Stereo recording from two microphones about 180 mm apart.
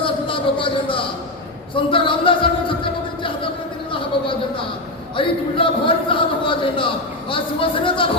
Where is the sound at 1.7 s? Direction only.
30° left (ahead or behind).